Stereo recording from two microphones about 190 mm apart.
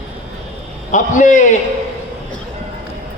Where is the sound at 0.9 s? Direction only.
40° left (ahead or behind).